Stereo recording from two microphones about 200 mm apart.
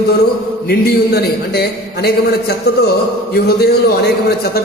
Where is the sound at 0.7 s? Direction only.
55° left (ahead or behind).